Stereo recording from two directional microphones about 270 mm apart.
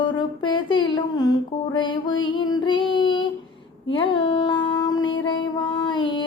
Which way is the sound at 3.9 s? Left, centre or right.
Centre.